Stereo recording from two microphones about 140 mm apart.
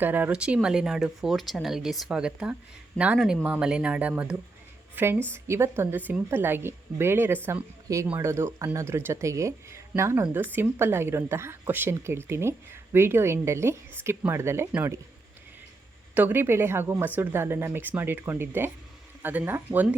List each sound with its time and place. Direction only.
0.0 s a woman's voice: 15° right (ahead or behind)
16.1 s a woman's voice: 15° right (ahead or behind)